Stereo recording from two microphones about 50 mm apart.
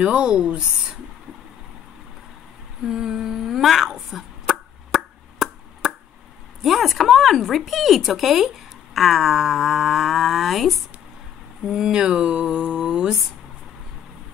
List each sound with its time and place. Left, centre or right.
0.0 s speech: centre
2.9 s humming: centre
6.6 s speech: centre